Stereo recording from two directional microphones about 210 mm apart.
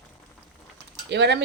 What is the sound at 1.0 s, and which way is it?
Speech, 55° right (ahead or behind).